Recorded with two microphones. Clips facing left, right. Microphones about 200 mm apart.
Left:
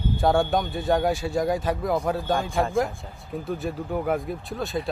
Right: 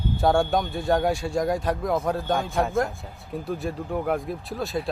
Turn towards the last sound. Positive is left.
turn(degrees=0)  # may be behind; listen again after turning